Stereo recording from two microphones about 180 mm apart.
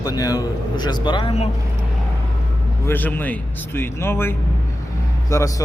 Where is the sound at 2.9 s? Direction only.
10° left (ahead or behind).